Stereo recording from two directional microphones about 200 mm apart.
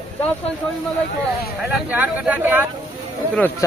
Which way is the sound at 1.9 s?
5° right (ahead or behind).